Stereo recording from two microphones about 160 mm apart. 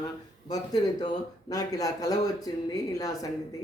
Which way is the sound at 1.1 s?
25° left (ahead or behind).